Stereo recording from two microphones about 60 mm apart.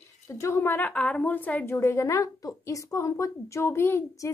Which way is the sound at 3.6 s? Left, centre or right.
Left.